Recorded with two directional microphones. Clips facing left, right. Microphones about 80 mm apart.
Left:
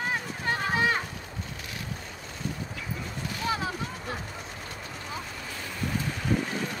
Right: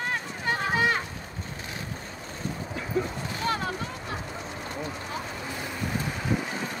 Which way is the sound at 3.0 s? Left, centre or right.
Right.